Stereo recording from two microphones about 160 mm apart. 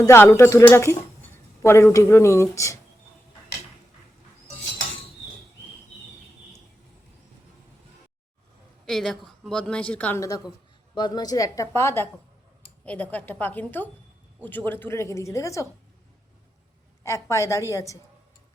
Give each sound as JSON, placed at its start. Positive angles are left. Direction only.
{"t": 0.0, "sound": "speech", "side_deg": 15}
{"t": 8.9, "sound": "a woman's voice", "side_deg": 0}
{"t": 10.2, "sound": "a woman's voice", "side_deg": 20}
{"t": 17.0, "sound": "a woman's voice", "side_deg": 20}